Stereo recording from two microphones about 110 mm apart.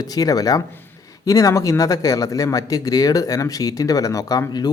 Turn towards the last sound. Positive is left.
turn(degrees=35)  # may be behind; listen again after turning